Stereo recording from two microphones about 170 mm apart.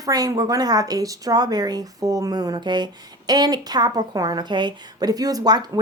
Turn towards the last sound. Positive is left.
turn(degrees=-25)  # may be behind; listen again after turning